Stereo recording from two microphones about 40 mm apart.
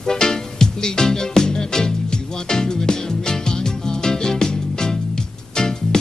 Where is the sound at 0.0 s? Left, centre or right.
Centre.